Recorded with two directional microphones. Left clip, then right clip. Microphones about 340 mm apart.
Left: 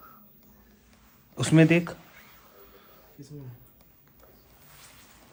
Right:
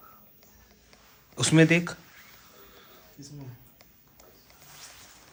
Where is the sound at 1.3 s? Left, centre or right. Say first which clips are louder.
Even; centre.